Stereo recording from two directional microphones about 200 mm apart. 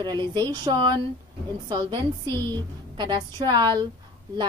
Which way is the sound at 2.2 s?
10° left (ahead or behind).